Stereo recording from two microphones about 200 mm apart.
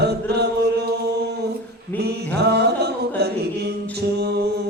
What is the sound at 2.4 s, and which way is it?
Music, 55° right (ahead or behind).